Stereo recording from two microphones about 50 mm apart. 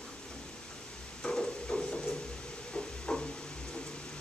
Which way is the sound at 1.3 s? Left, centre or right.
Centre.